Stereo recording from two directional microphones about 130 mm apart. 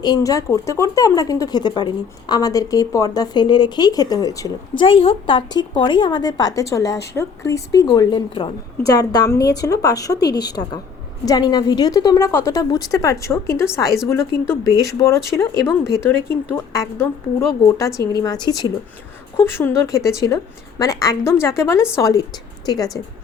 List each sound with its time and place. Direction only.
0.0 s a woman's voice: 30° left (ahead or behind)
4.7 s speech: 45° left (ahead or behind); by 7.9 s 25° left (ahead or behind)
7.9 s speech: 40° left (ahead or behind)
8.9 s a woman's voice: 30° left (ahead or behind)
19.4 s a woman's voice: 20° left (ahead or behind)